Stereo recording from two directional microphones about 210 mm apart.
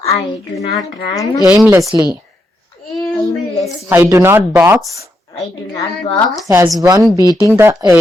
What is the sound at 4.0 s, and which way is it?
Speech, 10° right (ahead or behind).